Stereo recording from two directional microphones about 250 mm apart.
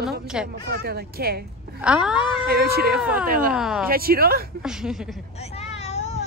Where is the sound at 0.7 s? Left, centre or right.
Right.